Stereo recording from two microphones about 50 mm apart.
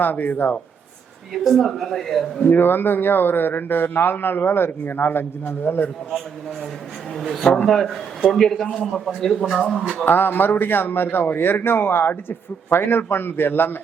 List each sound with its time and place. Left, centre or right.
0.0 s speech: left
1.5 s speech: centre
2.4 s a man's voice: left
7.2 s a man's voice: centre
10.1 s a man's voice: left